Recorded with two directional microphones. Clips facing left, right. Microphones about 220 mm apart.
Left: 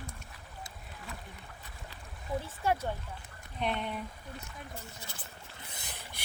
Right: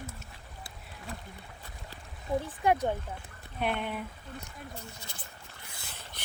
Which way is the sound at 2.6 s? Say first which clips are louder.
Right 4 dB; 15° right (ahead or behind).